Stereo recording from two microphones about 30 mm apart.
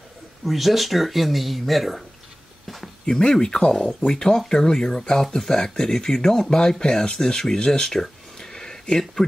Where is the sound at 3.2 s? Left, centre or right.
Left.